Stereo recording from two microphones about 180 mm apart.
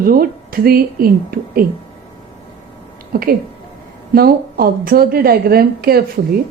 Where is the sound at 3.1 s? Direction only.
55° right (ahead or behind).